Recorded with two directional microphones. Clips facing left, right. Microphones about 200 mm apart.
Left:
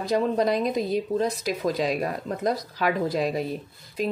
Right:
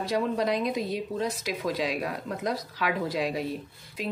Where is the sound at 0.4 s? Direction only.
40° left (ahead or behind).